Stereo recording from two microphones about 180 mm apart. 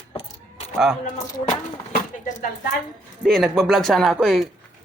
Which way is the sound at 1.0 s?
40° left (ahead or behind).